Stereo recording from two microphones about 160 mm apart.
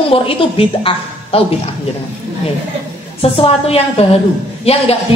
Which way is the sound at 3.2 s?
35° left (ahead or behind).